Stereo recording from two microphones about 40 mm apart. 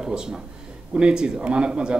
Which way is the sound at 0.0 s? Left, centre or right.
Centre.